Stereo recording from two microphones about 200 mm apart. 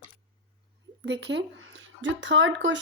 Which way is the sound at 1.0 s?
65° right (ahead or behind).